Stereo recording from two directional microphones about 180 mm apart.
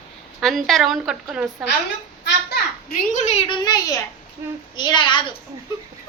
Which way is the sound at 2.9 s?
40° left (ahead or behind).